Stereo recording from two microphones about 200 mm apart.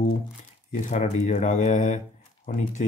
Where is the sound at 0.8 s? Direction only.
35° left (ahead or behind).